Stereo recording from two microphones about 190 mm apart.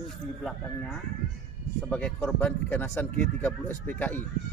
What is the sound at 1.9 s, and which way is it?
Speech, 10° left (ahead or behind).